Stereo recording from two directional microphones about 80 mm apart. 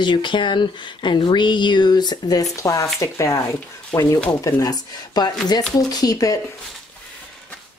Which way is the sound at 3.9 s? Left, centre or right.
Centre.